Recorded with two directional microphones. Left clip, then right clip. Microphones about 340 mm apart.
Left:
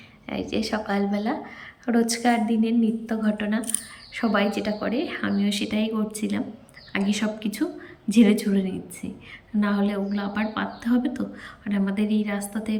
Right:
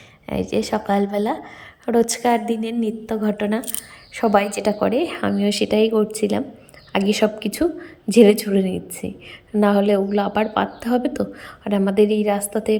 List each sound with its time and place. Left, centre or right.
0.3 s a woman's voice: right